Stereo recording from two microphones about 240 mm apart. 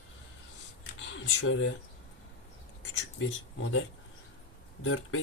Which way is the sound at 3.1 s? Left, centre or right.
Left.